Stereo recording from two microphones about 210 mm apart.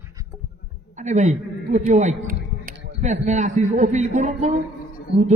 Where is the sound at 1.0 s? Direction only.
35° right (ahead or behind).